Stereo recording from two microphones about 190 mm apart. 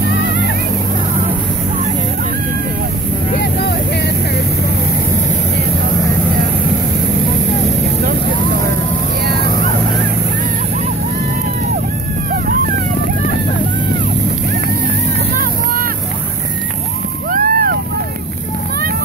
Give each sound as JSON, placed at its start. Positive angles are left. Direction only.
{"t": 9.2, "sound": "vehicle", "side_deg": -60}
{"t": 15.3, "sound": "vehicle", "side_deg": -45}
{"t": 17.3, "sound": "a sound", "side_deg": -50}